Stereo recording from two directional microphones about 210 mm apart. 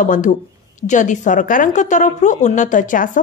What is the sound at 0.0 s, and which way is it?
A woman's voice, 35° left (ahead or behind).